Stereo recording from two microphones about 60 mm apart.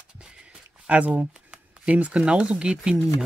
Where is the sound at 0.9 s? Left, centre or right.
Right.